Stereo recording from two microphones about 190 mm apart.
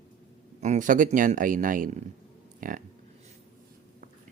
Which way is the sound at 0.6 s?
40° right (ahead or behind).